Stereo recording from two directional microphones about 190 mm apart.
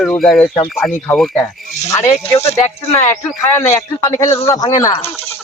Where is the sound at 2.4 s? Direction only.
35° left (ahead or behind).